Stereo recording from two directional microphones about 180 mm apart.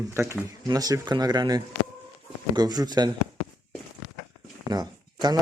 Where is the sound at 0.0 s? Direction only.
15° right (ahead or behind).